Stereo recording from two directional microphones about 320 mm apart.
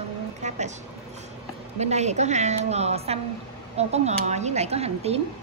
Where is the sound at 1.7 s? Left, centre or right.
Right.